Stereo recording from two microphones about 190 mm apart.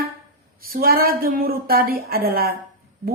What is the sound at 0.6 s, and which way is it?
A woman's voice, 50° right (ahead or behind).